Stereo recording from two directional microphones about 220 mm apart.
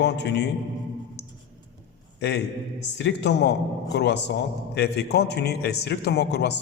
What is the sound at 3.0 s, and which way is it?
A man's voice, 50° left (ahead or behind).